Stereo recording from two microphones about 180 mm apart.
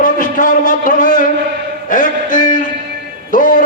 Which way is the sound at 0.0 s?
45° left (ahead or behind).